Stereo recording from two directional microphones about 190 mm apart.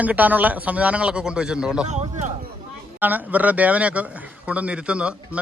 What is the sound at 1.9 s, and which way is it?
Speech, 35° right (ahead or behind).